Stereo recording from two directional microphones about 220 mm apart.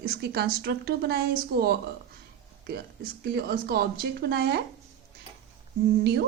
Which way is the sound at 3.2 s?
45° right (ahead or behind).